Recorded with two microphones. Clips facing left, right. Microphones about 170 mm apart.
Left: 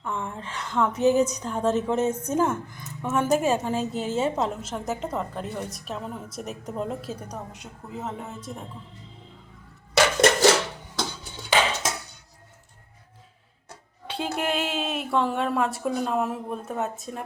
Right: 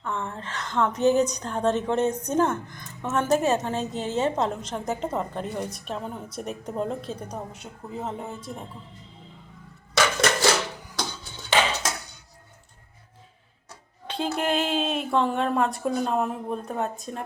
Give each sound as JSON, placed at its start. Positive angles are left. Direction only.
{"t": 0.0, "sound": "a woman's voice", "side_deg": 10}
{"t": 10.0, "sound": "music", "side_deg": 30}
{"t": 14.1, "sound": "a woman's voice", "side_deg": 10}